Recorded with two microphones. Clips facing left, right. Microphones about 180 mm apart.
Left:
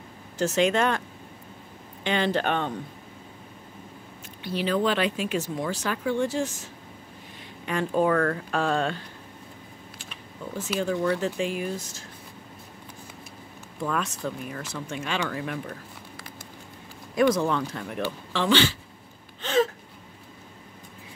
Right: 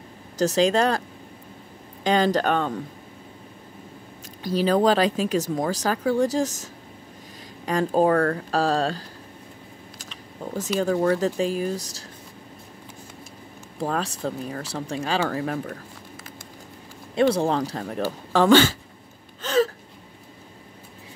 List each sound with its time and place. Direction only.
0.4 s speech: 35° right (ahead or behind)
2.0 s speech: 40° right (ahead or behind)
4.4 s speech: 40° right (ahead or behind)
11.1 s speech: 40° right (ahead or behind)
13.7 s speech: 35° right (ahead or behind)
17.1 s speech: 30° right (ahead or behind); by 18.8 s 45° right (ahead or behind)
19.4 s gasp: 40° right (ahead or behind)